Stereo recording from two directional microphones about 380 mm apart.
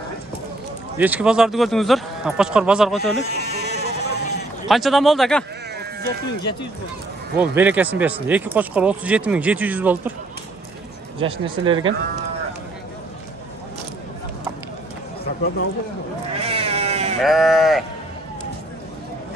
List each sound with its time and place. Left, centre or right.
0.9 s speech: centre
3.0 s sheep: left
4.6 s speech: centre
7.3 s speech: centre
11.1 s speech: centre
16.4 s cat: centre
17.2 s speech: centre